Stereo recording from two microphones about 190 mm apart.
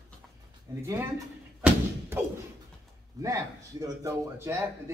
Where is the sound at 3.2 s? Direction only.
20° right (ahead or behind).